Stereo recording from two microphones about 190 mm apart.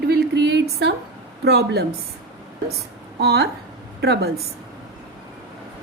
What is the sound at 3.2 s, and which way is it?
A woman's voice, 60° right (ahead or behind).